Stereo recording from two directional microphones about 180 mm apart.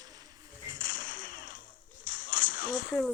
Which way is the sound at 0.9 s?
50° left (ahead or behind).